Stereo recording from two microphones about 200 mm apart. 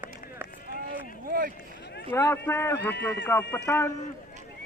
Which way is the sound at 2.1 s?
15° left (ahead or behind).